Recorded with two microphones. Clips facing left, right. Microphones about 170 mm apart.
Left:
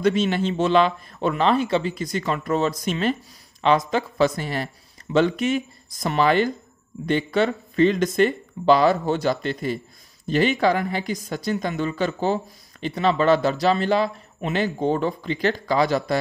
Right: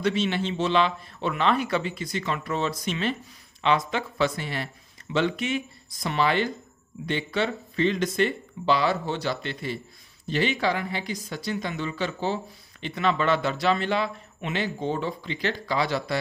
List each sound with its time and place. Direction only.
0.0 s speech: 45° left (ahead or behind)